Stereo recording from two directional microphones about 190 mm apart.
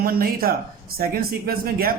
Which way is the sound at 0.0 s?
50° right (ahead or behind).